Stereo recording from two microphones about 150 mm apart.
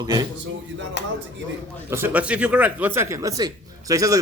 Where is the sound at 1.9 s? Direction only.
10° right (ahead or behind).